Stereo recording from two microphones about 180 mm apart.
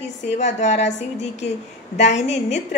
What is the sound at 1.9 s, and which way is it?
Speech, 40° left (ahead or behind).